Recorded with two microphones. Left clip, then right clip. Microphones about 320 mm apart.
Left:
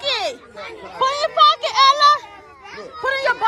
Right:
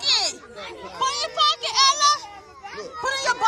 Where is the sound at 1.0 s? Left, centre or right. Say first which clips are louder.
Left 7 dB; centre.